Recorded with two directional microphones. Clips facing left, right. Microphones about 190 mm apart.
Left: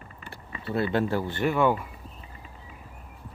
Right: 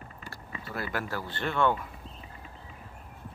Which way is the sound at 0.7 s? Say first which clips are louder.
Left 9 dB; 25° left (ahead or behind).